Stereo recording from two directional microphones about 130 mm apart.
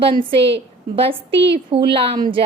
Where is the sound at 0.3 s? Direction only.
45° right (ahead or behind).